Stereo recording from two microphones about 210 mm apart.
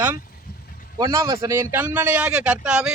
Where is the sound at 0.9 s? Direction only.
15° right (ahead or behind).